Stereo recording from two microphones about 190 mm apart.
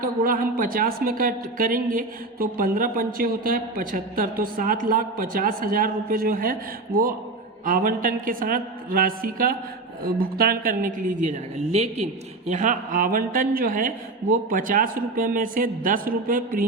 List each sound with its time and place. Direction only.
0.0 s a woman's voice: 50° right (ahead or behind)